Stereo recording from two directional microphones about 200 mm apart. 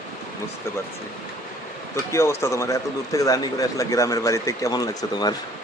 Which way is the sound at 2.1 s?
15° left (ahead or behind).